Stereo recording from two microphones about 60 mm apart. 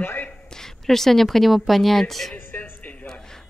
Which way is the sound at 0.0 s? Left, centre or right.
Left.